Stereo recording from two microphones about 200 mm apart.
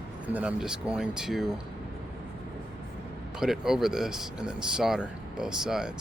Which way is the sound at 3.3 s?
Centre (ahead or behind).